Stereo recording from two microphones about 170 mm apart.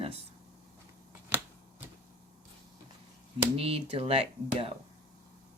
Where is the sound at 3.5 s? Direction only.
35° right (ahead or behind).